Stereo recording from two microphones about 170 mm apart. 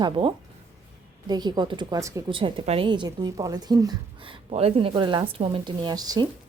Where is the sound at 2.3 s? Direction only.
30° right (ahead or behind).